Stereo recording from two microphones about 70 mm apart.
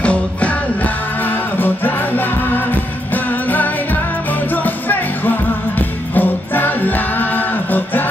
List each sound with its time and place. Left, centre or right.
0.0 s music: centre